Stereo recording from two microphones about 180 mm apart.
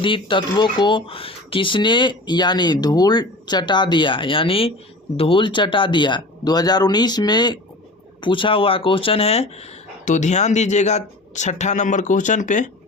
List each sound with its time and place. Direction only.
0.0 s speech: 30° left (ahead or behind); by 12.7 s 45° left (ahead or behind)